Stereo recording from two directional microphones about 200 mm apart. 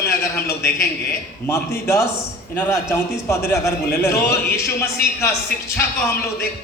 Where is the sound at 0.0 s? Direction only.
15° left (ahead or behind).